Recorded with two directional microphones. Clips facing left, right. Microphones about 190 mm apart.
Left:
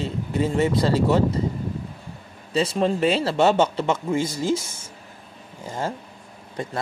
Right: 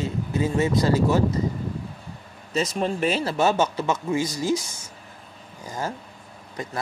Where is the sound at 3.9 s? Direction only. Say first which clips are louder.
Left 1 dB; 55° left (ahead or behind).